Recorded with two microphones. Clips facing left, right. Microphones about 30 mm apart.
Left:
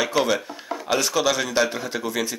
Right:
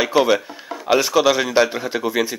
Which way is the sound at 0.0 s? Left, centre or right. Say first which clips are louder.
Right 5 dB; centre.